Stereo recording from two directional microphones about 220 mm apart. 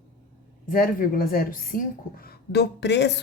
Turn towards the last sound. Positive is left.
turn(degrees=50)  # may be behind; listen again after turning